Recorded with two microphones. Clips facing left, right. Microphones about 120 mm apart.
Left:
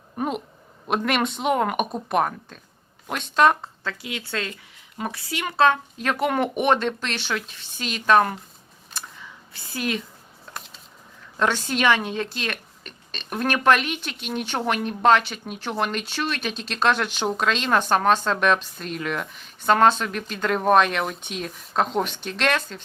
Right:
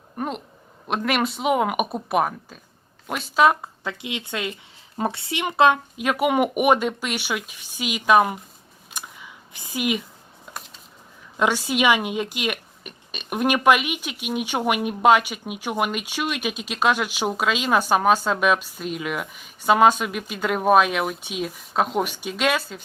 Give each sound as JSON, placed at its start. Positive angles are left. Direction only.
{"t": 0.2, "sound": "speech", "side_deg": 5}
{"t": 3.8, "sound": "a woman's voice", "side_deg": -20}
{"t": 4.9, "sound": "speech", "side_deg": -30}
{"t": 8.9, "sound": "a sound", "side_deg": -15}
{"t": 11.3, "sound": "speech", "side_deg": -10}